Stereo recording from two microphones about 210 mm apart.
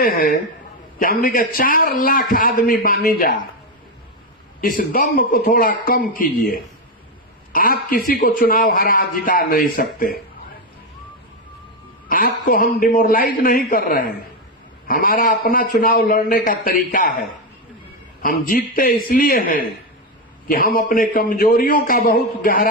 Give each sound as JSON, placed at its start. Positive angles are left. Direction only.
{"t": 0.0, "sound": "a man's voice", "side_deg": 45}
{"t": 4.6, "sound": "a man's voice", "side_deg": 40}
{"t": 12.0, "sound": "a man's voice", "side_deg": 40}